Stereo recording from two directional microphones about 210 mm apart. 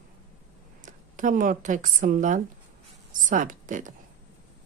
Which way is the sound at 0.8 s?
40° right (ahead or behind).